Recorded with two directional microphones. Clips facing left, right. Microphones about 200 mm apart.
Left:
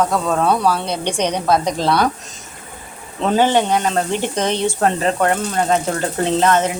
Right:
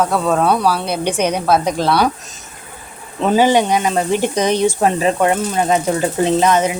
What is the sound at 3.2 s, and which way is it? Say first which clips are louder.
Speech: right 2 dB; 10° right (ahead or behind).